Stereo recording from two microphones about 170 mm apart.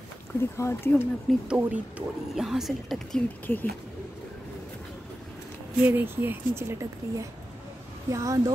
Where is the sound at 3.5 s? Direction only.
10° left (ahead or behind).